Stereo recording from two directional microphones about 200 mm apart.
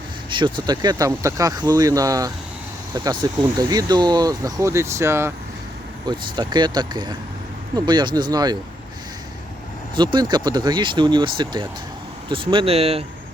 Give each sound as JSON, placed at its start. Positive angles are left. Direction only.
{"t": 0.3, "sound": "speech", "side_deg": -25}
{"t": 9.9, "sound": "speech", "side_deg": -25}